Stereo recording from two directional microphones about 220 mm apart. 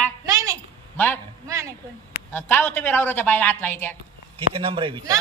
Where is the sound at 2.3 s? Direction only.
10° left (ahead or behind).